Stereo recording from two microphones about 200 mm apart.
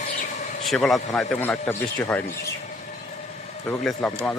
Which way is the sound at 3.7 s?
5° left (ahead or behind).